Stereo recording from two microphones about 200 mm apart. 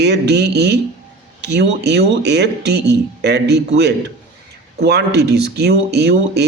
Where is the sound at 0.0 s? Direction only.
55° right (ahead or behind).